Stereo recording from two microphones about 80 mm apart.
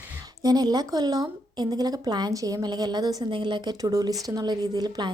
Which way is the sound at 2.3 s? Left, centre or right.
Right.